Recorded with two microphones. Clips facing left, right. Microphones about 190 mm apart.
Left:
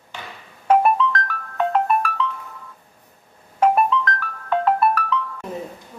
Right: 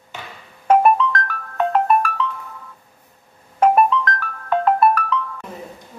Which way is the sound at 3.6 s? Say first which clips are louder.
Right 2 dB; 50° right (ahead or behind).